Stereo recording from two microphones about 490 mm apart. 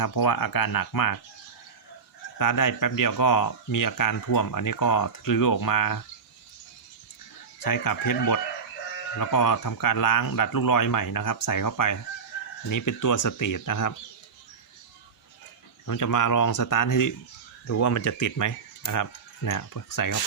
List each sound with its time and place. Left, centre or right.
0.0 s speech: left
2.4 s speech: left
7.6 s speech: left
15.9 s speech: left